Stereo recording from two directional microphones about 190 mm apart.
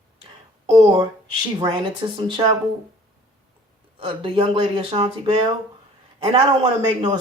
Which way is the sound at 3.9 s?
30° right (ahead or behind).